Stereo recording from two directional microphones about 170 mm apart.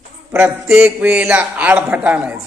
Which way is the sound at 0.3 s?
10° right (ahead or behind).